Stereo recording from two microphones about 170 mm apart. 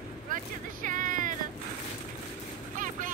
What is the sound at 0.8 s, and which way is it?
Music, 50° right (ahead or behind).